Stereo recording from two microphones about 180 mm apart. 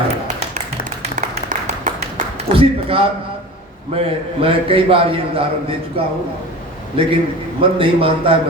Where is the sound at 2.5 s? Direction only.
30° right (ahead or behind).